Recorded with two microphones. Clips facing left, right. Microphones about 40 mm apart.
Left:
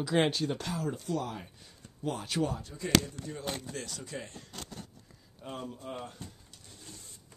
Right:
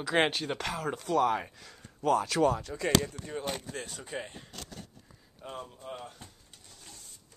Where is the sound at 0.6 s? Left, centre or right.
Right.